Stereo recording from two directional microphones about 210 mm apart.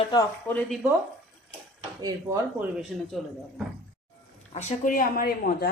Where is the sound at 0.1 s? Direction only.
15° left (ahead or behind).